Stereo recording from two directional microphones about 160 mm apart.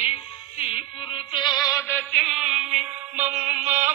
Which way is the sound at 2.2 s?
5° right (ahead or behind).